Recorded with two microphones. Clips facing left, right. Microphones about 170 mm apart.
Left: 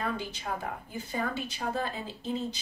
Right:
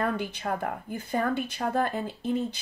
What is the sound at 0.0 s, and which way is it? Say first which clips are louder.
A woman's voice: right 5 dB; 55° right (ahead or behind).